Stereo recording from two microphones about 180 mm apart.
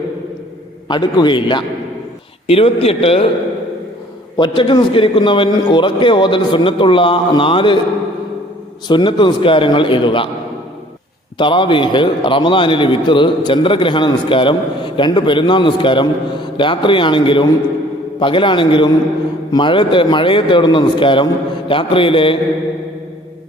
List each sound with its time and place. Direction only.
0.9 s a man's voice: 25° left (ahead or behind)
4.4 s a man's voice: 25° left (ahead or behind)
8.9 s a man's voice: 25° left (ahead or behind)
11.3 s a man's voice: 25° left (ahead or behind)